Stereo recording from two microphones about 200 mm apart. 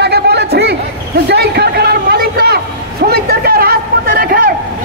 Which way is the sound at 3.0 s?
50° right (ahead or behind).